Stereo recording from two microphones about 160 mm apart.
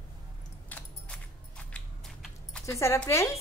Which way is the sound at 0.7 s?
10° left (ahead or behind).